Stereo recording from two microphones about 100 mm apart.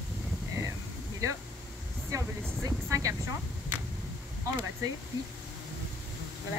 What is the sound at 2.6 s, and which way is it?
Speech, 35° right (ahead or behind).